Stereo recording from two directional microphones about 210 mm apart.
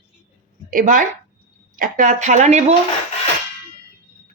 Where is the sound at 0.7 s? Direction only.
40° right (ahead or behind).